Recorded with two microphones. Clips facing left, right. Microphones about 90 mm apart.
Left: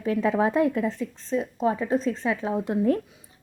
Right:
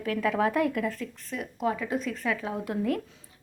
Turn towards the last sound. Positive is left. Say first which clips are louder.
# left 6 dB
turn(degrees=25)  # may be behind; listen again after turning